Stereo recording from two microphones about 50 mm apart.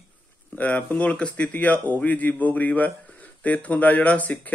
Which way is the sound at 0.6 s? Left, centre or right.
Left.